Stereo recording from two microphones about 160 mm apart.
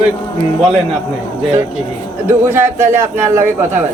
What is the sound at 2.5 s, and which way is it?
Speech, 15° right (ahead or behind).